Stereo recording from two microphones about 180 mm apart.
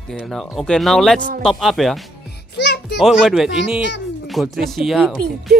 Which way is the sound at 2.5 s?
70° left (ahead or behind).